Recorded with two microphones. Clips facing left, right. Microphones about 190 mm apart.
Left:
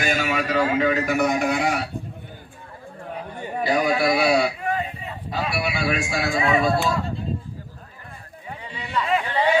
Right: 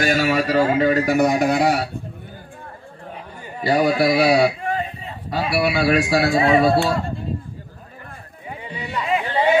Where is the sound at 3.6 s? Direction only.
35° right (ahead or behind).